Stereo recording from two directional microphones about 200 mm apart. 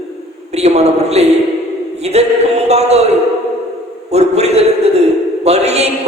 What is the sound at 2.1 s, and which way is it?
Music, 35° right (ahead or behind).